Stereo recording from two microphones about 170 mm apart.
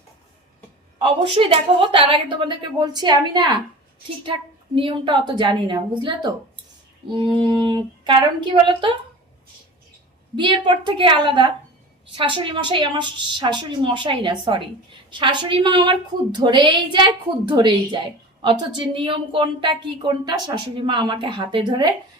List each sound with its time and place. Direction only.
1.0 s a woman's voice: 30° right (ahead or behind)
10.3 s a woman's voice: 25° right (ahead or behind)